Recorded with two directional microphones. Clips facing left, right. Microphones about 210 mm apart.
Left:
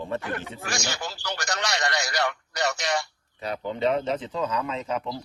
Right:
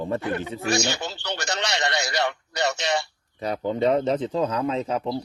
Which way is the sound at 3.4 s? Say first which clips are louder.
Right 5 dB; 40° right (ahead or behind).